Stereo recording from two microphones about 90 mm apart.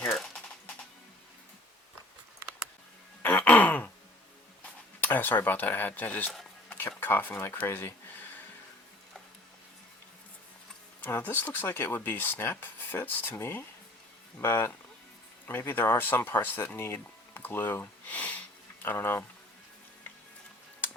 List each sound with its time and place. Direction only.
3.2 s throat clearing: 15° left (ahead or behind)
4.9 s speech: 25° left (ahead or behind)
11.0 s speech: 20° left (ahead or behind)